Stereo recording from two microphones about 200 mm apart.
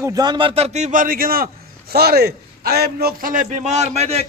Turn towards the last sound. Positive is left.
turn(degrees=-30)  # may be behind; listen again after turning